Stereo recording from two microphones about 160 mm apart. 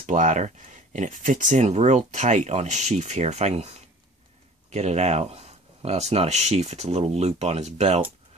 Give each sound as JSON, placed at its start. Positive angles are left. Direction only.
{"t": 0.0, "sound": "speech", "side_deg": -50}